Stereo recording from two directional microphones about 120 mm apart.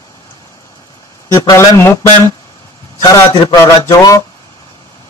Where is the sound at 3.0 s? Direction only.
30° left (ahead or behind).